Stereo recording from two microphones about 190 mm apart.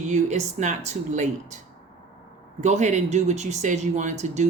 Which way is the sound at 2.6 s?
35° right (ahead or behind).